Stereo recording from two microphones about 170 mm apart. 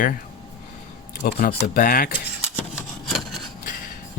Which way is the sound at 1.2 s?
60° left (ahead or behind).